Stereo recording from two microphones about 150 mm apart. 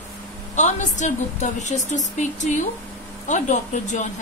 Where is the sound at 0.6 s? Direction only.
55° left (ahead or behind).